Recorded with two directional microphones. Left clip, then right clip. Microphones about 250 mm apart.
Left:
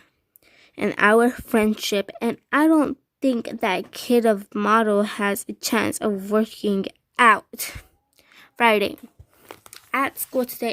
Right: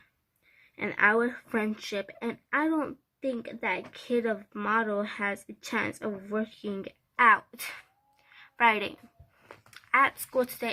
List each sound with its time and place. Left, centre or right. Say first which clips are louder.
0.8 s speech: left 7 dB; left
8.3 s a sound: left 6 dB; left
9.5 s speech: even; left